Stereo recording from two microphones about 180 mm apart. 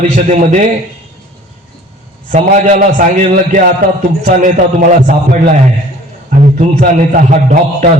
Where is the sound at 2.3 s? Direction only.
45° right (ahead or behind).